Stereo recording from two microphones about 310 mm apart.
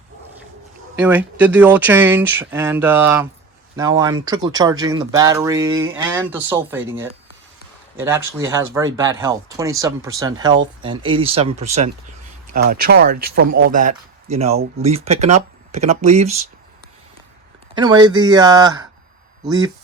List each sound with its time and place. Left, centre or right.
0.9 s speech: centre
7.9 s speech: centre
17.7 s speech: centre